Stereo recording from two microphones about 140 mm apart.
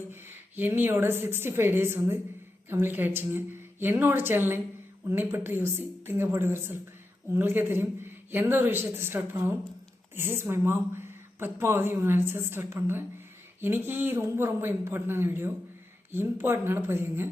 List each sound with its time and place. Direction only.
0.1 s speech: 15° right (ahead or behind)